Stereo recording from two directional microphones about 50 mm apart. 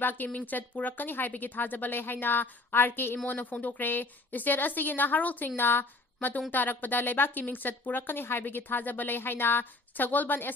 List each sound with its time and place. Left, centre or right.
0.0 s a woman's voice: left
3.3 s a woman's voice: left
5.6 s a woman's voice: left